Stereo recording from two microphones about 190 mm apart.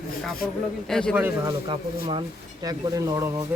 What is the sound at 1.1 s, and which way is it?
Speech, 10° right (ahead or behind).